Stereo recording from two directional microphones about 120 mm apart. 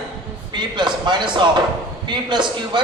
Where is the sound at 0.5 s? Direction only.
40° right (ahead or behind).